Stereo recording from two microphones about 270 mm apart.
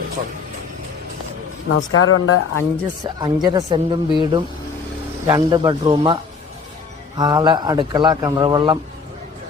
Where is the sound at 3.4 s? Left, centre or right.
Centre.